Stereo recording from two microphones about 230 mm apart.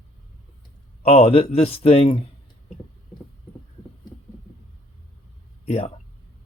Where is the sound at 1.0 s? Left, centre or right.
Left.